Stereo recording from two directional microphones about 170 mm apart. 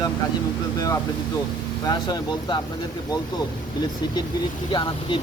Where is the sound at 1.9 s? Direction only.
25° left (ahead or behind).